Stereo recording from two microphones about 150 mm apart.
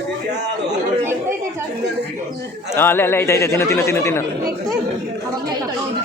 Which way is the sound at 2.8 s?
15° left (ahead or behind).